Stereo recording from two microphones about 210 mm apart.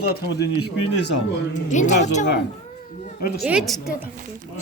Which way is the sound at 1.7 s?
35° left (ahead or behind).